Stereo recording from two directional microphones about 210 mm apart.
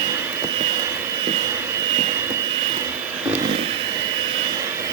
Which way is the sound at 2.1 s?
15° right (ahead or behind).